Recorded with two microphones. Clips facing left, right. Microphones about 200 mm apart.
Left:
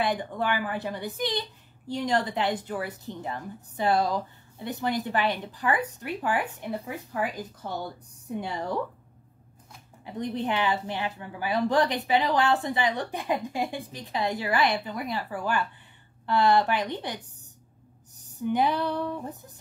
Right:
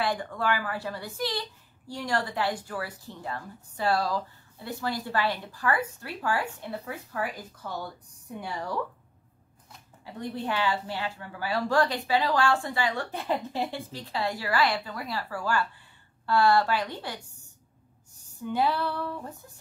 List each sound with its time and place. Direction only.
0.0 s a woman's voice: 20° left (ahead or behind)
10.0 s a woman's voice: 20° left (ahead or behind)